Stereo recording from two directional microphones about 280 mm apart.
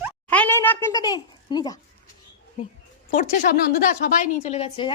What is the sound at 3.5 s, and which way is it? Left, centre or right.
A woman's voice, left.